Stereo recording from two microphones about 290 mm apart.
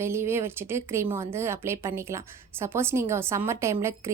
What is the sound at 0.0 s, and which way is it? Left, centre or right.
Speech, centre.